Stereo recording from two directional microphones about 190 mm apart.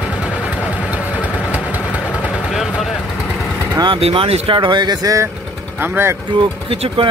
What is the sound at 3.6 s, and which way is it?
Speech, 20° right (ahead or behind).